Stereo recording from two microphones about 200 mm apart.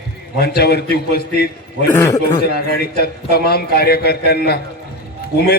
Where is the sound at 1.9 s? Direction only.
15° left (ahead or behind).